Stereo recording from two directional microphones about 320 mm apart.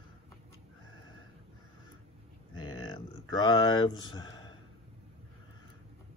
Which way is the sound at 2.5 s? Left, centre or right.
Left.